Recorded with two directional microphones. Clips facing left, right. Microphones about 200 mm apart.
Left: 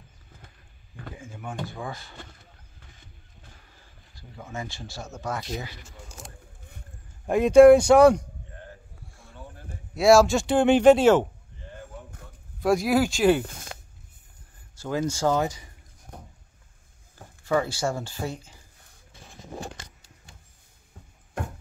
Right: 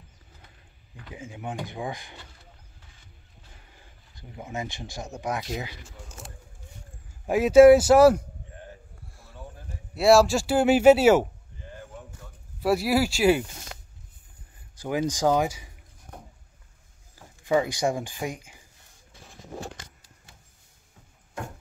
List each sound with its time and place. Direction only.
1.1 s speech: 20° right (ahead or behind)
4.1 s speech: 20° right (ahead or behind)
5.9 s a sound: centre (ahead or behind)
7.2 s speech: 5° right (ahead or behind)
9.9 s speech: centre (ahead or behind)
12.5 s speech: 5° right (ahead or behind)
14.8 s speech: 15° right (ahead or behind)
17.1 s speech: 15° right (ahead or behind)